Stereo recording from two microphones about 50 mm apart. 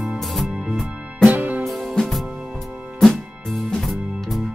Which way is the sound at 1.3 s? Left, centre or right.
Right.